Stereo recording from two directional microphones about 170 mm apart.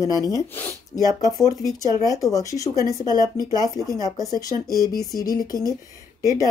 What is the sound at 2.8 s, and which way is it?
Speech, 20° right (ahead or behind).